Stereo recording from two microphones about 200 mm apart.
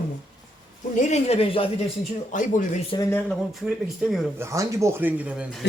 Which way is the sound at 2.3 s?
40° left (ahead or behind).